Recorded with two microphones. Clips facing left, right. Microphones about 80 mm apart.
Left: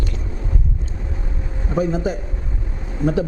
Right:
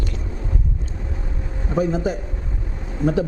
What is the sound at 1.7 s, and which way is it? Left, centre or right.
Speech, left.